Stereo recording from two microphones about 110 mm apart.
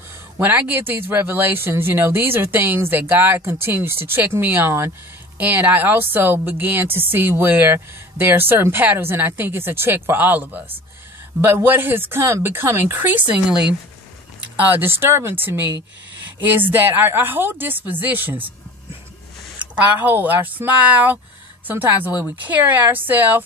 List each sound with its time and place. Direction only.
0.4 s a woman's voice: 15° right (ahead or behind)
14.8 s a woman's voice: 20° right (ahead or behind)
19.7 s a woman's voice: 15° right (ahead or behind)